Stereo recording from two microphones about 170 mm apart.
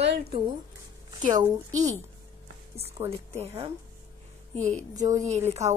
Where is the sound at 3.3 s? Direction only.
35° right (ahead or behind).